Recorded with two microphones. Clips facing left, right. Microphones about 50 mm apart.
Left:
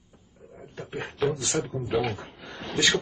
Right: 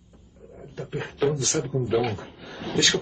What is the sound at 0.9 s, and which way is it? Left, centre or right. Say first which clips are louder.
Speech: right 3 dB; centre.